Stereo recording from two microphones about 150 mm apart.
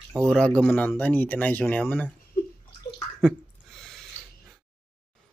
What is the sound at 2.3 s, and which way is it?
Bathtub, 70° left (ahead or behind).